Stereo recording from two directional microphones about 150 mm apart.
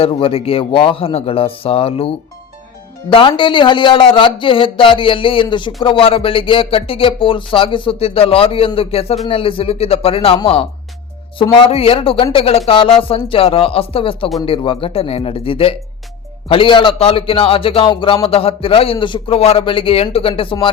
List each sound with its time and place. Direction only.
0.0 s a man's voice: 40° left (ahead or behind)